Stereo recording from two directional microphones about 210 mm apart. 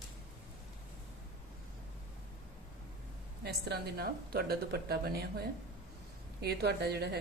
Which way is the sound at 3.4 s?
50° right (ahead or behind).